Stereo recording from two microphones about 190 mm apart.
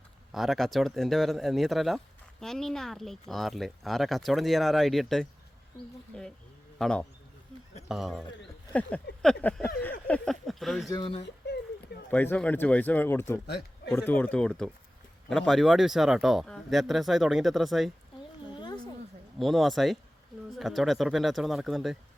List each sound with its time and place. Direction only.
0.3 s speech: centre (ahead or behind)
6.7 s a man's voice: 5° left (ahead or behind)
8.7 s a sound: 5° left (ahead or behind)
10.1 s speech: centre (ahead or behind)
10.8 s speech: 25° left (ahead or behind)
11.4 s a sound: 65° left (ahead or behind)
12.1 s speech: 10° left (ahead or behind)
19.4 s speech: centre (ahead or behind)